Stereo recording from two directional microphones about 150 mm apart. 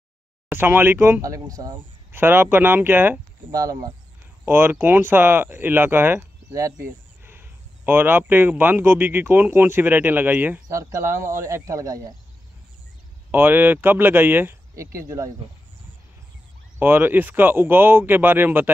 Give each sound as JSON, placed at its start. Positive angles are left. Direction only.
{"t": 0.5, "sound": "speech", "side_deg": -15}
{"t": 13.3, "sound": "speech", "side_deg": -15}
{"t": 16.7, "sound": "speech", "side_deg": -15}